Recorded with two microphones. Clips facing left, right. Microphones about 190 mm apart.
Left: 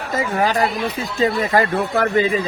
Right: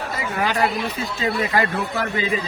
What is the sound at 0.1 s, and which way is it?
Speech, 40° left (ahead or behind).